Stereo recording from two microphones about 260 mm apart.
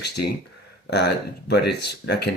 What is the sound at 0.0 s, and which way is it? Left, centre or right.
Speech, left.